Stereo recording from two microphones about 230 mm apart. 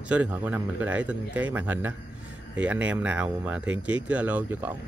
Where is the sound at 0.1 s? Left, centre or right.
Centre.